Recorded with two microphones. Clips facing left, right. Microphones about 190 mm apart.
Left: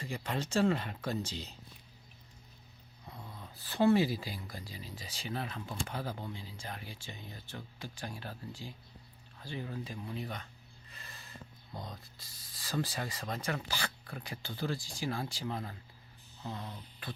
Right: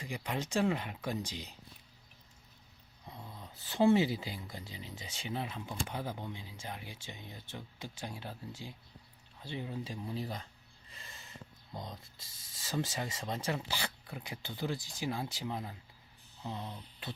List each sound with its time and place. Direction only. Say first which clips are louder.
0.0 s speech: left 1 dB; 15° right (ahead or behind)
3.3 s speech: right 1 dB; 20° right (ahead or behind)
10.9 s a sound: even; 25° right (ahead or behind)
11.9 s speech: even; 25° right (ahead or behind)